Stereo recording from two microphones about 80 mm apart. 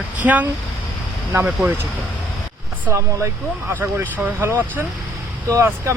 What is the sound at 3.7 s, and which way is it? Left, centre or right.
Speech, right.